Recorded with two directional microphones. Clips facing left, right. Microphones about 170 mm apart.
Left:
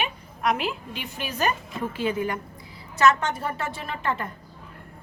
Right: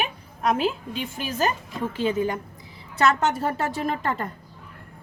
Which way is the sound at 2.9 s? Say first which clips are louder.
Even; 35° right (ahead or behind).